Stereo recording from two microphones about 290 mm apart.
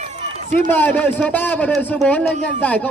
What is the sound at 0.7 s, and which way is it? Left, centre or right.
A man's voice, centre.